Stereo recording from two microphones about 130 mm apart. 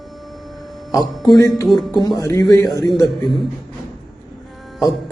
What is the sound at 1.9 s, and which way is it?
Speech, 30° left (ahead or behind).